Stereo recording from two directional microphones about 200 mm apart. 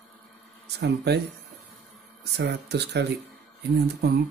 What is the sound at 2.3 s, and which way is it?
Speech, 55° right (ahead or behind).